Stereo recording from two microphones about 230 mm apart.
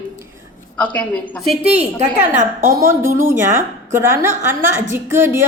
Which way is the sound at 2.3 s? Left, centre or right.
Right.